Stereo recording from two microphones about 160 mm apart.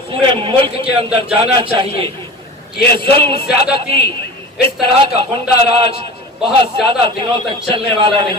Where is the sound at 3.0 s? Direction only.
35° right (ahead or behind).